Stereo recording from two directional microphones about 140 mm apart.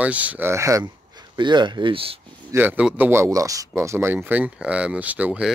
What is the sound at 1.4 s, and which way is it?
Speech, 35° right (ahead or behind).